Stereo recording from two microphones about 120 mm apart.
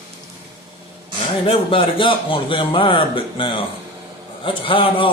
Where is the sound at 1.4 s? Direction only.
50° left (ahead or behind).